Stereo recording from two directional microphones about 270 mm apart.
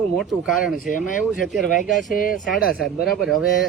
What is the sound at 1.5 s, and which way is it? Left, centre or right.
Speech, centre.